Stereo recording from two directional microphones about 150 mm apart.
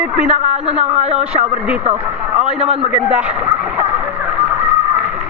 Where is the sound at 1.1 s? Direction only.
5° right (ahead or behind).